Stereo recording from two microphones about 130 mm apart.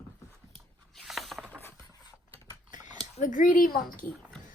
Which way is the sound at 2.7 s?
80° left.